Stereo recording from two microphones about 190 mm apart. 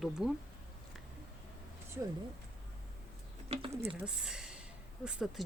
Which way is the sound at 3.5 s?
30° right (ahead or behind).